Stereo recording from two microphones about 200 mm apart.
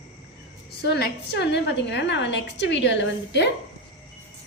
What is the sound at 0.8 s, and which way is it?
A woman's voice, 55° left (ahead or behind).